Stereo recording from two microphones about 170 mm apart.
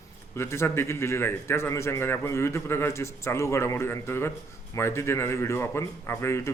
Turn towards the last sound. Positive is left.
turn(degrees=15)  # may be behind; listen again after turning